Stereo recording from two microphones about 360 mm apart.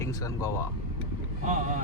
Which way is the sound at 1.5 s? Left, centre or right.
Centre.